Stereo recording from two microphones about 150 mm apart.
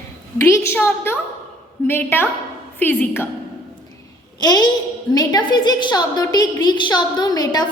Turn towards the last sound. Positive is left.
turn(degrees=25)  # may be behind; listen again after turning